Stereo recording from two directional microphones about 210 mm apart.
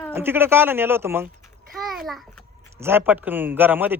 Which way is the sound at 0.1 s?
10° right (ahead or behind).